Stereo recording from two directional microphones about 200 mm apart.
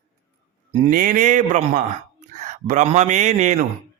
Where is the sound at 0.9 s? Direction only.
45° right (ahead or behind).